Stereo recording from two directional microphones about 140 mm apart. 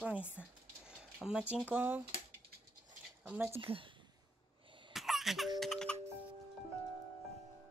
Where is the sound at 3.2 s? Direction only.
15° right (ahead or behind).